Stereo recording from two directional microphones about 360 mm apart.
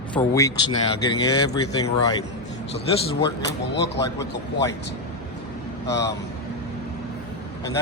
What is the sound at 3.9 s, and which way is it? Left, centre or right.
Speech, centre.